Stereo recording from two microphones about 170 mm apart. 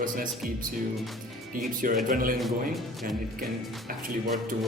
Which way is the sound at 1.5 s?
55° right (ahead or behind).